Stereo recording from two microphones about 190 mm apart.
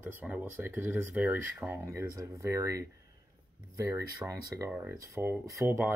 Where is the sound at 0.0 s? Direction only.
10° right (ahead or behind).